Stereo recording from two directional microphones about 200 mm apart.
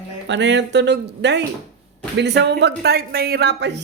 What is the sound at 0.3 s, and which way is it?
Speech, 60° right (ahead or behind).